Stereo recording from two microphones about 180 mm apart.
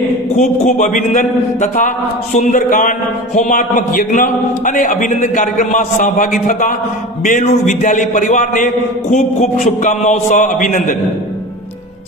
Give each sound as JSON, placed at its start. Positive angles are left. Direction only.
{"t": 0.3, "sound": "a man's voice", "side_deg": 40}